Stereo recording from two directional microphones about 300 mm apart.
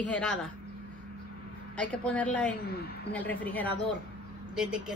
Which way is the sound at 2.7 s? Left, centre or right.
Left.